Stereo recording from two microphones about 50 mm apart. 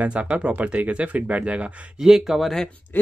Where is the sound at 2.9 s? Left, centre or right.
Left.